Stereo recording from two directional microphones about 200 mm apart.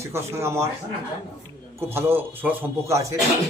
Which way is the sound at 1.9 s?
10° right (ahead or behind).